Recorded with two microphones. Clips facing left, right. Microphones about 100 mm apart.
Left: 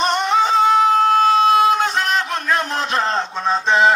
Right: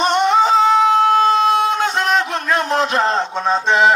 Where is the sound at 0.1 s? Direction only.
Centre (ahead or behind).